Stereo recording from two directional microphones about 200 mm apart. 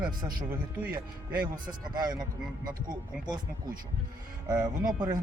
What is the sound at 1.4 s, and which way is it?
Speech, 20° right (ahead or behind).